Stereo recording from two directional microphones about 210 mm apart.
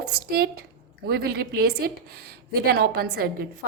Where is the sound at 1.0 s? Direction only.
45° right (ahead or behind).